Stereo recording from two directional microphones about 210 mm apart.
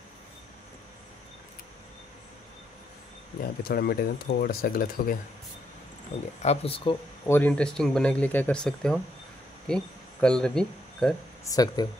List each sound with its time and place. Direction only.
3.6 s speech: 45° left (ahead or behind)
6.1 s speech: 30° left (ahead or behind)
7.2 s speech: 10° left (ahead or behind)
11.4 s speech: 20° left (ahead or behind)